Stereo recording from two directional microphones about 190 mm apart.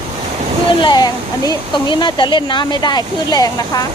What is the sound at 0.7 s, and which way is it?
Speech, 25° left (ahead or behind).